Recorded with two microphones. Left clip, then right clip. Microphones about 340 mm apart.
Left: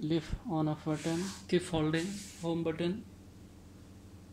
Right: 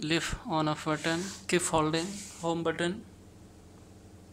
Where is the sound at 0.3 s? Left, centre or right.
Right.